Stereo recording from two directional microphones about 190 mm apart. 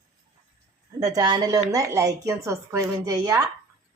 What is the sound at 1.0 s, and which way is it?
A woman's voice, 20° right (ahead or behind).